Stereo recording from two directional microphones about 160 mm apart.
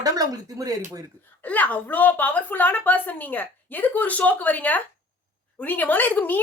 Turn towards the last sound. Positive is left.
turn(degrees=10)  # may be behind; listen again after turning